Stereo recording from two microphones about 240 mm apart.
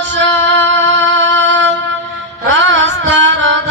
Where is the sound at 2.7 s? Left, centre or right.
Right.